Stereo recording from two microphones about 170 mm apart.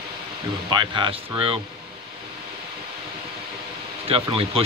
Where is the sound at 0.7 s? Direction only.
25° right (ahead or behind).